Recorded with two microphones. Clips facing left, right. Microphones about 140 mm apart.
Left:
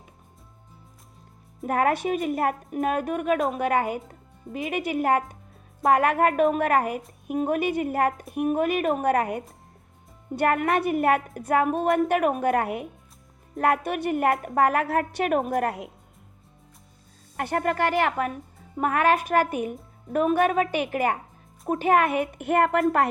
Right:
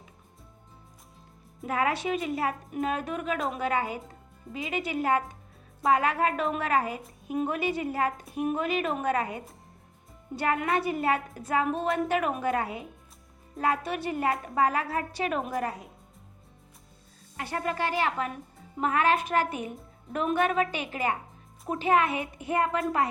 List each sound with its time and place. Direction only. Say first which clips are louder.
1.6 s a woman's voice: left 5 dB; 55° left (ahead or behind)
17.3 s a woman's voice: left 6 dB; 55° left (ahead or behind)